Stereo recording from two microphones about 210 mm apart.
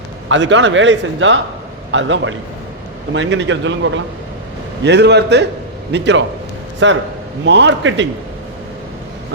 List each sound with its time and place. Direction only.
0.3 s speech: 60° right (ahead or behind)